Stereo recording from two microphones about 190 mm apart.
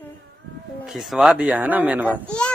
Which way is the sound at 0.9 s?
5° right (ahead or behind).